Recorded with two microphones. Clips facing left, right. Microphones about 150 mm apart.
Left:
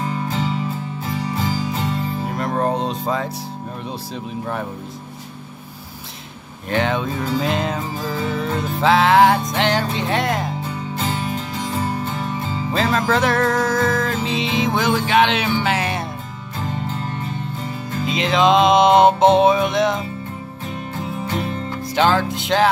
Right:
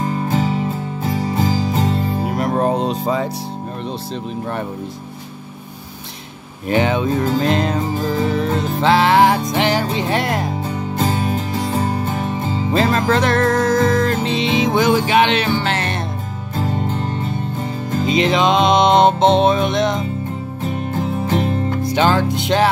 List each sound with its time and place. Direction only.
0.0 s music: 40° right (ahead or behind)
2.2 s music: 10° right (ahead or behind)
6.7 s music: 5° right (ahead or behind)
8.8 s music: centre (ahead or behind)
11.0 s music: 40° right (ahead or behind)
12.7 s music: centre (ahead or behind)
18.0 s music: centre (ahead or behind)
21.4 s music: 45° right (ahead or behind)
21.8 s music: centre (ahead or behind)